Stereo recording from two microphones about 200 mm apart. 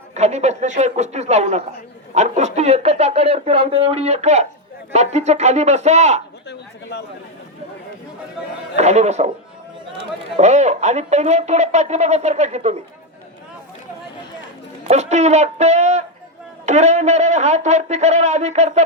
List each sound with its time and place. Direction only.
0.1 s speech: 35° right (ahead or behind)
6.9 s speech: 55° left (ahead or behind)
8.7 s speech: 35° right (ahead or behind)
10.3 s speech: 35° right (ahead or behind)
14.8 s speech: 35° right (ahead or behind)